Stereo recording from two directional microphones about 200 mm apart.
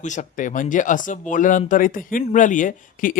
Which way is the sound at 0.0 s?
40° left (ahead or behind).